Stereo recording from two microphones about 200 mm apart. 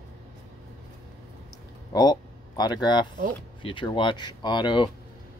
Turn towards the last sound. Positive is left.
turn(degrees=20)  # may be behind; listen again after turning